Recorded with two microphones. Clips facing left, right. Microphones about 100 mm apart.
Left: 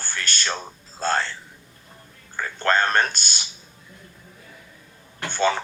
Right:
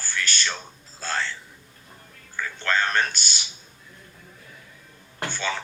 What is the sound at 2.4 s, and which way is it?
Speech, 45° left (ahead or behind).